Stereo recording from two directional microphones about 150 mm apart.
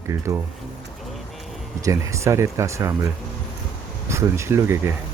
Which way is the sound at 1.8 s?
20° right (ahead or behind).